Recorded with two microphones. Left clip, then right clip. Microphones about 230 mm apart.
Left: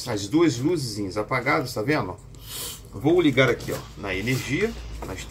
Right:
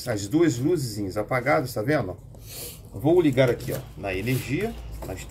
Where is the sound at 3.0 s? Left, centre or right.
Centre.